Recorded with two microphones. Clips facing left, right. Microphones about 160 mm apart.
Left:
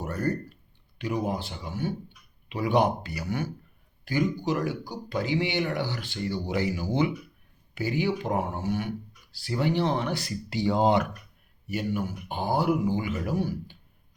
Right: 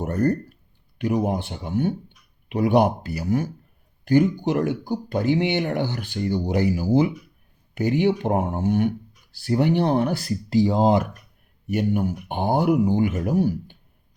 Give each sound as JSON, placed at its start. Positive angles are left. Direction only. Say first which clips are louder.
{"t": 0.0, "sound": "a sound", "louder": "right 7 dB", "side_deg": -45}
{"t": 0.9, "sound": "speech", "louder": "right 6 dB", "side_deg": -55}
{"t": 3.2, "sound": "speech", "louder": "right 7 dB", "side_deg": -35}
{"t": 4.1, "sound": "speech", "louder": "right 7 dB", "side_deg": -55}
{"t": 7.8, "sound": "speech", "louder": "right 7 dB", "side_deg": -55}
{"t": 10.7, "sound": "speech", "louder": "even", "side_deg": -40}
{"t": 11.7, "sound": "speech", "louder": "right 7 dB", "side_deg": -55}